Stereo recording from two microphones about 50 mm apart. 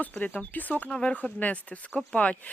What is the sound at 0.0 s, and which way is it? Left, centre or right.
Speech, left.